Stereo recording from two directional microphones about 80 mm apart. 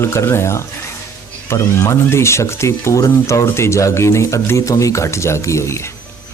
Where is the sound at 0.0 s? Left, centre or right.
Left.